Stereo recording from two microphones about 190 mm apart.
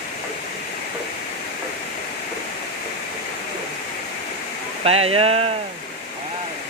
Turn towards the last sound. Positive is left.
turn(degrees=-30)  # may be behind; listen again after turning